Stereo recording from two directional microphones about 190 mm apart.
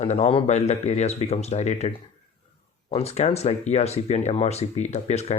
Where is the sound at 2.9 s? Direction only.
35° left (ahead or behind).